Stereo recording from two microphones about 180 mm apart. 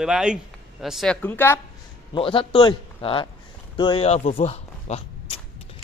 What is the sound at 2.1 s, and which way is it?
Speech, 30° left (ahead or behind).